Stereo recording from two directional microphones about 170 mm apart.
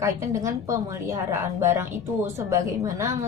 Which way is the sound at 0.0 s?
15° right (ahead or behind).